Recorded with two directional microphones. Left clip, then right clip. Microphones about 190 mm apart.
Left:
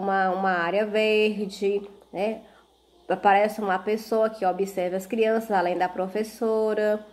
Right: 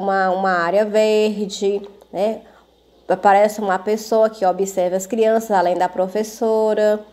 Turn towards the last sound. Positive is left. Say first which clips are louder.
# right 7 dB
turn(degrees=-20)  # may be behind; listen again after turning